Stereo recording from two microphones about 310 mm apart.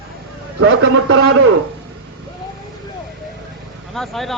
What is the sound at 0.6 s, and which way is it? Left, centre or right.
Speech, right.